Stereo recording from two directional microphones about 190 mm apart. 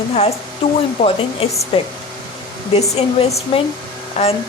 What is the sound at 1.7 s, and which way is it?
A woman's voice, 30° left (ahead or behind).